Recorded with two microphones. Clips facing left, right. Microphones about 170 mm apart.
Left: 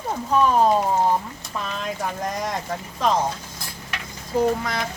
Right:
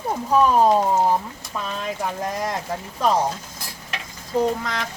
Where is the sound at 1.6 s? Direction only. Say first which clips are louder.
Right 1 dB; 5° right (ahead or behind).